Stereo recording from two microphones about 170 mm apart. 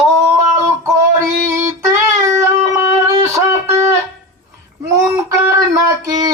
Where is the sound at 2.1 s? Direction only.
15° right (ahead or behind).